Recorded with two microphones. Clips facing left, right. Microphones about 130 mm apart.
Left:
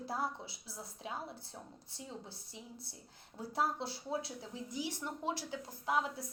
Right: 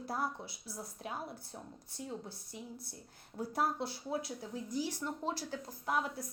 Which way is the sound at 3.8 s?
25° left (ahead or behind).